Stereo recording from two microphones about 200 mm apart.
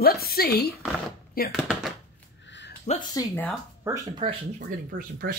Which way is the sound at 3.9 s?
15° right (ahead or behind).